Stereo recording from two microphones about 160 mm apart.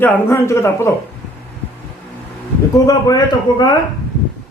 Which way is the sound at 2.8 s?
25° left (ahead or behind).